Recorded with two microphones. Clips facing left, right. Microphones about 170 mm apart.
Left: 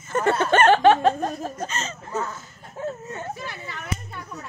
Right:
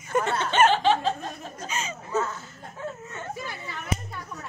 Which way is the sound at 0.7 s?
60° left (ahead or behind).